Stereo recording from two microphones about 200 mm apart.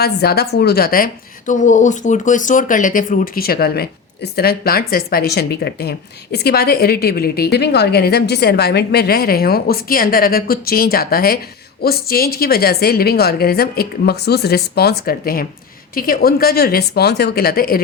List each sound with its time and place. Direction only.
0.0 s a woman's voice: 50° left (ahead or behind)